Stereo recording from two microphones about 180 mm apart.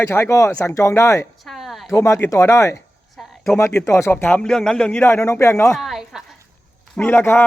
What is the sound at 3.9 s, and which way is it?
A man's voice, 15° left (ahead or behind).